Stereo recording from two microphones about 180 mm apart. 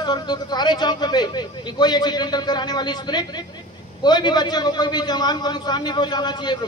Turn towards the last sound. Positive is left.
turn(degrees=25)  # may be behind; listen again after turning